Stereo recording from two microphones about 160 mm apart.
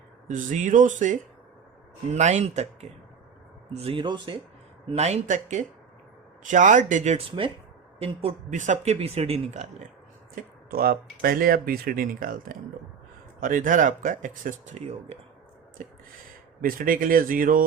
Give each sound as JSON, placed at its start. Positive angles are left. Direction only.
{"t": 0.3, "sound": "speech", "side_deg": -55}
{"t": 3.7, "sound": "speech", "side_deg": -40}
{"t": 4.9, "sound": "speech", "side_deg": -40}
{"t": 7.3, "sound": "speech", "side_deg": -30}
{"t": 8.4, "sound": "speech", "side_deg": -50}
{"t": 10.3, "sound": "speech", "side_deg": -65}
{"t": 16.6, "sound": "speech", "side_deg": -60}